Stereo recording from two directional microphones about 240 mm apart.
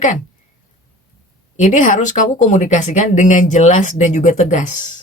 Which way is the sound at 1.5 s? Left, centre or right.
Left.